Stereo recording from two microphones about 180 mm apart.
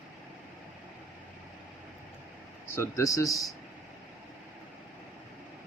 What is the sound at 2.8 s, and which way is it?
Speech, 15° left (ahead or behind).